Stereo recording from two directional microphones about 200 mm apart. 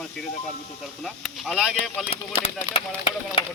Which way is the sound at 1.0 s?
Centre (ahead or behind).